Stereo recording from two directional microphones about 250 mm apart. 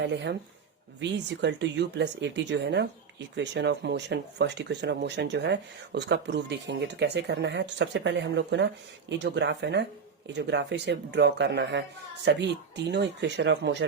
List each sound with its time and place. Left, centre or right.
0.9 s speech: right